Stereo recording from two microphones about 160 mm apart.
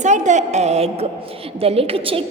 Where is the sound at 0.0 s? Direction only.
50° right (ahead or behind).